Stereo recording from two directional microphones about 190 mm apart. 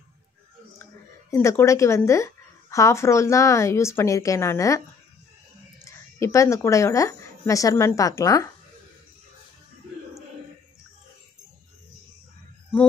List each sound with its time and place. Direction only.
1.3 s speech: 15° left (ahead or behind)
5.9 s speech: 15° left (ahead or behind)